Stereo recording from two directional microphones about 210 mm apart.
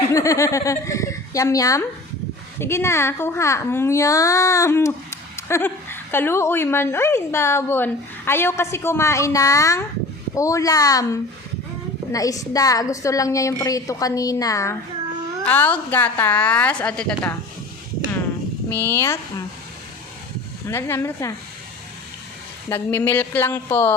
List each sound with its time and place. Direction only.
0.1 s a woman's voice: 15° left (ahead or behind)
18.7 s a woman's voice: 10° left (ahead or behind)
20.7 s a woman's voice: 10° left (ahead or behind)
22.7 s a woman's voice: 10° left (ahead or behind)